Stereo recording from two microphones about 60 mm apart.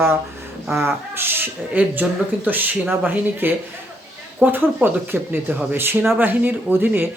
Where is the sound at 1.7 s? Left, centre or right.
Right.